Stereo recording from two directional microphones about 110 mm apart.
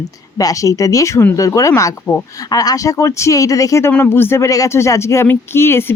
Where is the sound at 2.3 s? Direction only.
30° left (ahead or behind).